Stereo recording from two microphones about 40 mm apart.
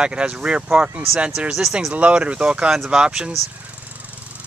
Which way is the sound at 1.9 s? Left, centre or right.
Right.